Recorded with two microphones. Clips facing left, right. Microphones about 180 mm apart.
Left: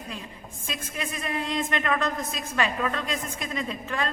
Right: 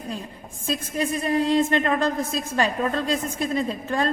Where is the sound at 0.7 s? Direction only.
35° right (ahead or behind).